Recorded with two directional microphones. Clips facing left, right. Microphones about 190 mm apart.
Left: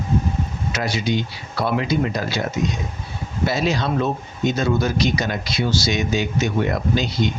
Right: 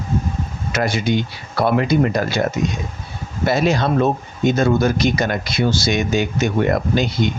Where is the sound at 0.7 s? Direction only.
50° right (ahead or behind).